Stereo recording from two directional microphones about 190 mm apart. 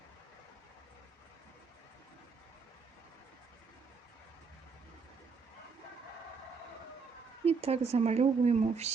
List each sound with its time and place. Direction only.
7.4 s speech: 35° right (ahead or behind)